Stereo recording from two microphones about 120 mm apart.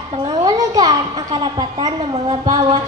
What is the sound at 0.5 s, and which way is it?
A child's voice, 30° right (ahead or behind).